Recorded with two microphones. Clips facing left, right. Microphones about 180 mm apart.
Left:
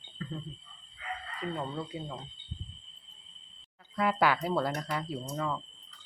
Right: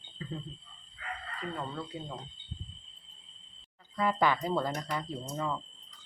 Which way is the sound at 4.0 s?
10° left (ahead or behind).